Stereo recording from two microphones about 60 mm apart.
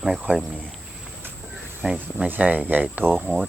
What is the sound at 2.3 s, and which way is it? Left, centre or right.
Speech, right.